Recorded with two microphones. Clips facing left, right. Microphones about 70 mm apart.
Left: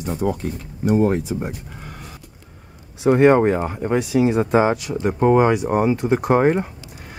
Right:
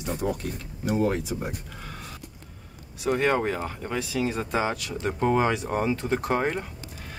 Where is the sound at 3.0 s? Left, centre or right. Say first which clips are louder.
Left 10 dB; left.